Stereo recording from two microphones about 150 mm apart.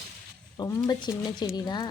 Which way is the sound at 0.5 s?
25° left (ahead or behind).